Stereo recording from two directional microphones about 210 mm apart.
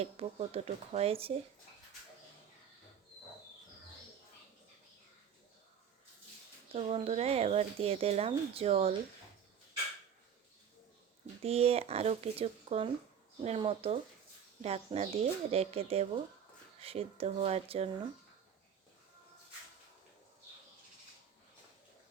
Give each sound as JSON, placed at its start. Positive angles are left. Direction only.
{"t": 0.0, "sound": "speech", "side_deg": -30}
{"t": 6.7, "sound": "speech", "side_deg": -30}
{"t": 11.4, "sound": "speech", "side_deg": -30}